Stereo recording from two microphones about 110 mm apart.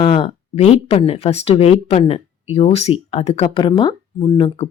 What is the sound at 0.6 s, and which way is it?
Speech, 75° left (ahead or behind).